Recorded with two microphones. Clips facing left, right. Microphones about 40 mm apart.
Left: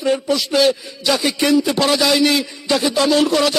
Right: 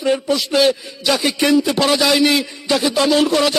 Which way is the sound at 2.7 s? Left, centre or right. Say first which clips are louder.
Even; centre.